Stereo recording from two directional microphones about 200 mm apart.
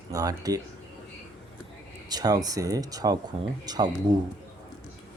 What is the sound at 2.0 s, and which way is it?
Speech, 20° right (ahead or behind).